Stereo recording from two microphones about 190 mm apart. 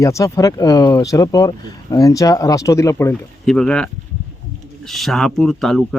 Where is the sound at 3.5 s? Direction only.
5° left (ahead or behind).